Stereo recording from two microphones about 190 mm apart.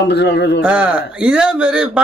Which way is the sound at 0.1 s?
65° left (ahead or behind).